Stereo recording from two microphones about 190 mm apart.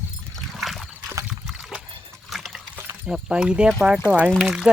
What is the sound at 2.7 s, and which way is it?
Speech, 10° right (ahead or behind).